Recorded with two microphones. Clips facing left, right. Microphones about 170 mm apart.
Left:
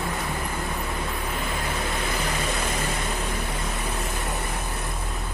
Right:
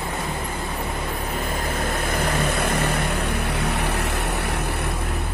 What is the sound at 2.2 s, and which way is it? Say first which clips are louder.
Vehicle: right 5 dB; 60° right (ahead or behind).